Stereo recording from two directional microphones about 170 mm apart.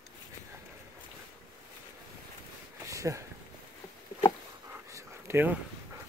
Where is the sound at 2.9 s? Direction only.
20° right (ahead or behind).